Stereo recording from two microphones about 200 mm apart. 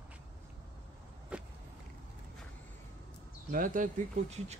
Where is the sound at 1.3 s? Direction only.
5° right (ahead or behind).